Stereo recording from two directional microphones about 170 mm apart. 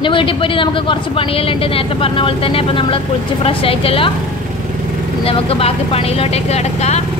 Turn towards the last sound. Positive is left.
turn(degrees=40)  # may be behind; listen again after turning